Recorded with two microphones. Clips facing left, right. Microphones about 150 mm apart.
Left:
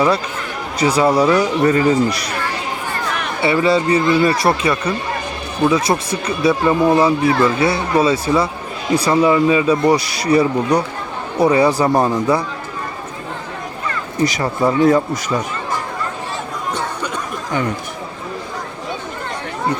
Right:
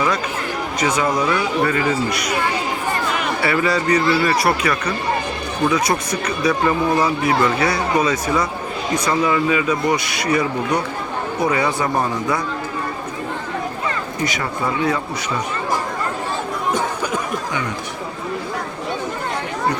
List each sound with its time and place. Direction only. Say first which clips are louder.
0.8 s speech: left 6 dB; 35° left (ahead or behind)
3.4 s speech: left 5 dB; 25° left (ahead or behind)
14.2 s speech: left 9 dB; 35° left (ahead or behind)
16.7 s chatter: right 1 dB; 10° right (ahead or behind)